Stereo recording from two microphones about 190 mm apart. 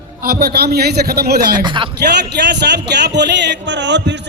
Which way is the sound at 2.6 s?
60° right (ahead or behind).